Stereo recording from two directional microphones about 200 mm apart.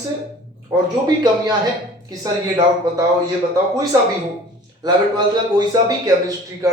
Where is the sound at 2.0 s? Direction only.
20° right (ahead or behind).